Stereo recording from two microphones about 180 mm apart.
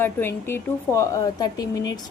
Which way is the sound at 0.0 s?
15° left (ahead or behind).